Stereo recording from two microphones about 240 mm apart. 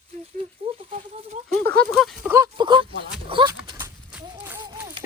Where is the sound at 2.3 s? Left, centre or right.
Centre.